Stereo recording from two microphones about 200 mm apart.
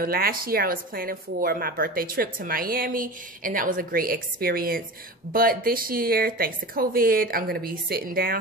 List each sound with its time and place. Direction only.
0.0 s speech: 50° right (ahead or behind)